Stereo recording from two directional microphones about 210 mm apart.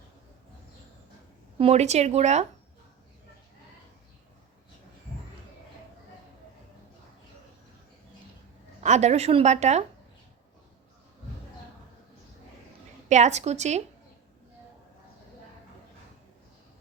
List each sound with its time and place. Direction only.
1.5 s a woman's voice: 30° right (ahead or behind)
8.8 s a woman's voice: 35° right (ahead or behind)
13.1 s a woman's voice: 35° right (ahead or behind)